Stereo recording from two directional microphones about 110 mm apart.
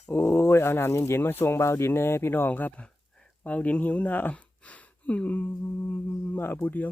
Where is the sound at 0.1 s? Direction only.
20° left (ahead or behind).